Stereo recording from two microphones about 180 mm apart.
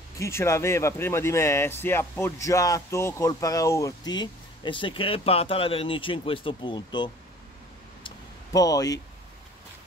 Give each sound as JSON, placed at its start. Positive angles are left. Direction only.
{"t": 0.2, "sound": "speech", "side_deg": 15}
{"t": 8.5, "sound": "speech", "side_deg": 20}